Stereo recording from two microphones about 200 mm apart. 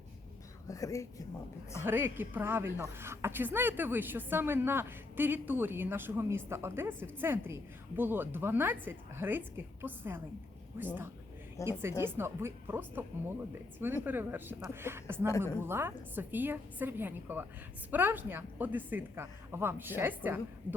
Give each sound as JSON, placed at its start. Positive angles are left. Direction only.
{"t": 0.7, "sound": "speech", "side_deg": 15}
{"t": 1.8, "sound": "speech", "side_deg": -10}
{"t": 11.6, "sound": "speech", "side_deg": -10}